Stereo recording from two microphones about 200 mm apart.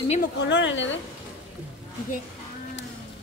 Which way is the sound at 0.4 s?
65° left (ahead or behind).